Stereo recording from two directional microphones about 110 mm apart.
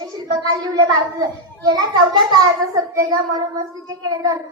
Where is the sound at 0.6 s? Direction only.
40° right (ahead or behind).